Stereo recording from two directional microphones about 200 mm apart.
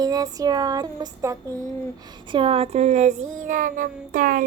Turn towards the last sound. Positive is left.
turn(degrees=-45)  # may be behind; listen again after turning